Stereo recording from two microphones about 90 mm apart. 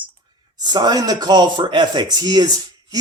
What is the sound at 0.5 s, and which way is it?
Speech, 50° right (ahead or behind).